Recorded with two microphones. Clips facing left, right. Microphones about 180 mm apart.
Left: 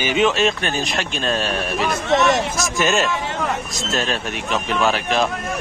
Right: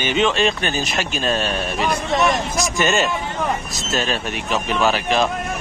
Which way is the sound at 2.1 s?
75° left (ahead or behind).